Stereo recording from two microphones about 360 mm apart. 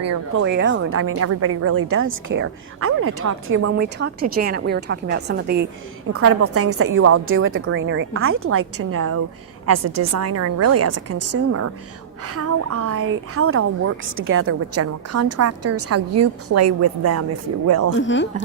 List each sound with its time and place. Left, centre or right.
0.0 s a woman's voice: right
0.4 s a woman's voice: right
3.8 s a woman's voice: right
6.1 s a woman's voice: right
17.9 s a woman's voice: left